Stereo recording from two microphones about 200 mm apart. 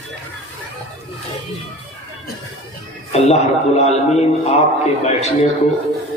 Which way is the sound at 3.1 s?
35° left (ahead or behind).